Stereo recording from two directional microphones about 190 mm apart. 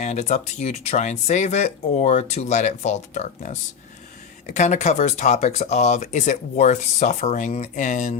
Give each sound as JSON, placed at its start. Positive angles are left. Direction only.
{"t": 0.0, "sound": "speech", "side_deg": 35}